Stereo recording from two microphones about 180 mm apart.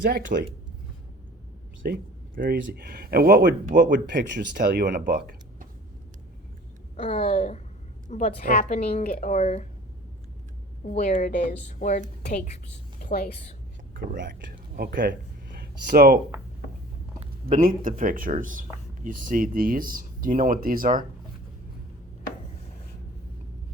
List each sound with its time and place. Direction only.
0.1 s speech: 50° right (ahead or behind)
1.8 s speech: 60° right (ahead or behind)
4.1 s speech: 65° right (ahead or behind)
5.0 s a sound: 55° right (ahead or behind)
7.1 s a woman's voice: 40° left (ahead or behind)
10.8 s a woman's voice: 40° left (ahead or behind)
13.0 s a woman's voice: 55° left (ahead or behind)
13.9 s speech: 50° right (ahead or behind)
17.5 s speech: 50° right (ahead or behind)